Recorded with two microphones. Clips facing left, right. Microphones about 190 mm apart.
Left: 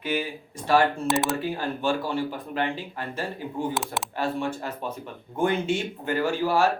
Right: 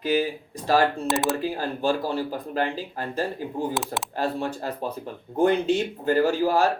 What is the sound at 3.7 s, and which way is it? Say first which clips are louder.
Speech: right 1 dB; centre (ahead or behind).